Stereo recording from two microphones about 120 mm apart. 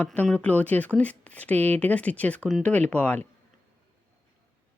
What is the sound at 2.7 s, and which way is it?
Speech, 10° left (ahead or behind).